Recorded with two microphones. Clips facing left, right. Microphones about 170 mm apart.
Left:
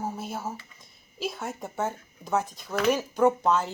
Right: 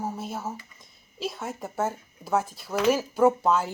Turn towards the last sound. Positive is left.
turn(degrees=-5)  # may be behind; listen again after turning